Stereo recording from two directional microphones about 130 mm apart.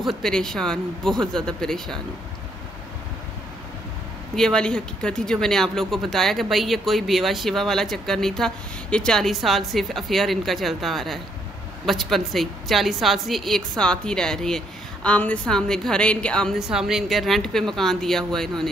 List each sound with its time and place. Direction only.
0.0 s speech: centre (ahead or behind)
4.4 s a woman's voice: 5° left (ahead or behind)
16.5 s speech: 5° right (ahead or behind)